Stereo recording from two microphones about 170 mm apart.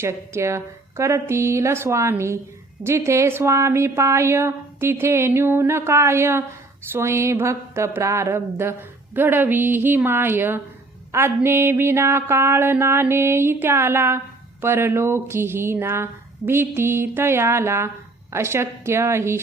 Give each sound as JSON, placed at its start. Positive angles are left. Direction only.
{"t": 0.0, "sound": "a woman's voice", "side_deg": -15}